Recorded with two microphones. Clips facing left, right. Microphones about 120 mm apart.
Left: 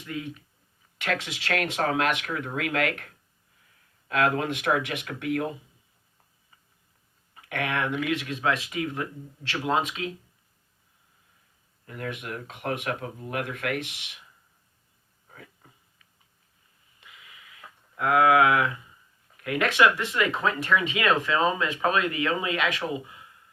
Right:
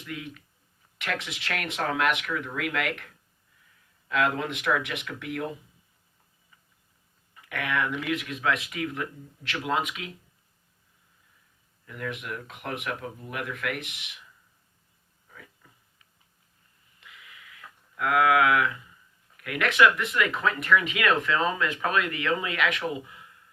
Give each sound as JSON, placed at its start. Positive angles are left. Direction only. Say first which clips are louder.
{"t": 0.0, "sound": "speech", "louder": "left 3 dB", "side_deg": 30}
{"t": 4.6, "sound": "speech", "louder": "left 1 dB", "side_deg": 35}
{"t": 7.5, "sound": "speech", "louder": "left 1 dB", "side_deg": 25}
{"t": 11.9, "sound": "speech", "louder": "even", "side_deg": 30}
{"t": 17.0, "sound": "a sound", "louder": "right 1 dB", "side_deg": 25}
{"t": 19.4, "sound": "speech", "louder": "even", "side_deg": 25}